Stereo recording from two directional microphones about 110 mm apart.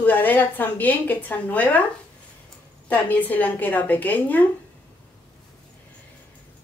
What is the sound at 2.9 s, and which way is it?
A woman's voice, 15° left (ahead or behind).